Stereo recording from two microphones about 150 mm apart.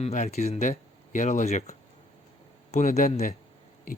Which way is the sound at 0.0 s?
50° left (ahead or behind).